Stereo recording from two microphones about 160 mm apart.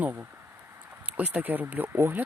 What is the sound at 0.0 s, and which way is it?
Speech, 10° right (ahead or behind).